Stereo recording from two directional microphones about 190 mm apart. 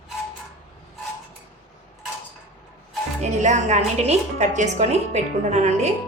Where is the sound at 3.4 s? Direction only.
40° right (ahead or behind).